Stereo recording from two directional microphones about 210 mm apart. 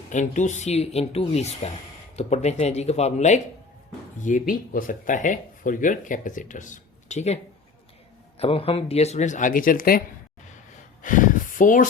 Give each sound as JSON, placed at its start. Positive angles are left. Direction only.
{"t": 0.1, "sound": "speech", "side_deg": 35}
{"t": 8.4, "sound": "speech", "side_deg": 25}
{"t": 11.0, "sound": "speech", "side_deg": 40}